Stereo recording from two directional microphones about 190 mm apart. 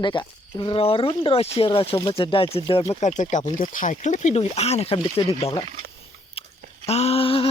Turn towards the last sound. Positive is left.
turn(degrees=30)  # may be behind; listen again after turning